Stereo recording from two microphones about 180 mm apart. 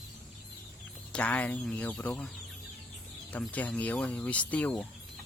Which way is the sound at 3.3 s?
10° left (ahead or behind).